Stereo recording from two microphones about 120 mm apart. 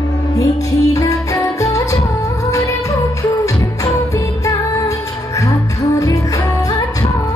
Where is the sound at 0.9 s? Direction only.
25° left (ahead or behind).